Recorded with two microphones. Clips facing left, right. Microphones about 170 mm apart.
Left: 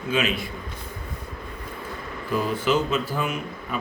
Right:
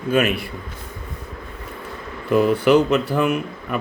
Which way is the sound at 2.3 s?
70° right (ahead or behind).